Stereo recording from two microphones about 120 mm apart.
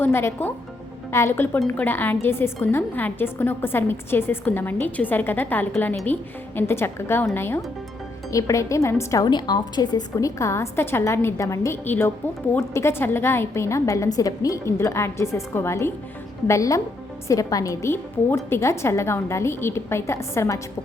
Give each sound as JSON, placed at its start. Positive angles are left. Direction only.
{"t": 0.0, "sound": "a woman's voice", "side_deg": 20}
{"t": 9.2, "sound": "a woman's voice", "side_deg": 35}